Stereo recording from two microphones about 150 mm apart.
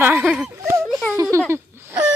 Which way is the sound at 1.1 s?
20° right (ahead or behind).